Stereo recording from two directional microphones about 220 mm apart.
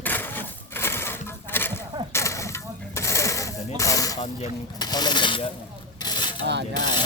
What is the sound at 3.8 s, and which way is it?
Snake, 15° left (ahead or behind).